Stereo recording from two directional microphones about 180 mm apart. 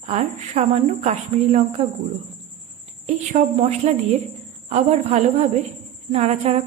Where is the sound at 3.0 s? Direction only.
40° right (ahead or behind).